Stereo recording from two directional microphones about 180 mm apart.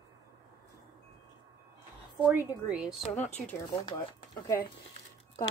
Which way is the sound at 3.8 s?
25° left (ahead or behind).